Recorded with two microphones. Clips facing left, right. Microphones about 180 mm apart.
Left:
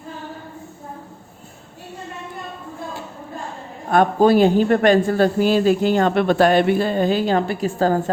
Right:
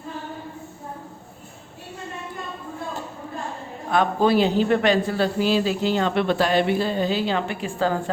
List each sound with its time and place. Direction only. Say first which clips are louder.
3.8 s a woman's voice: left 5 dB; 45° left (ahead or behind)